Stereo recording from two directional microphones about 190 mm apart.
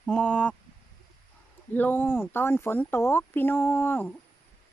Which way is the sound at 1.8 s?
10° left (ahead or behind).